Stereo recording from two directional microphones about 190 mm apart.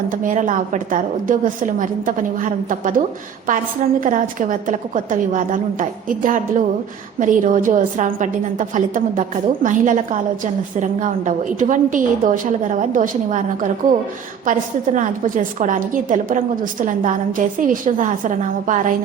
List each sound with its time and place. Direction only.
0.1 s a woman's voice: 45° right (ahead or behind)
4.0 s a woman's voice: 45° right (ahead or behind)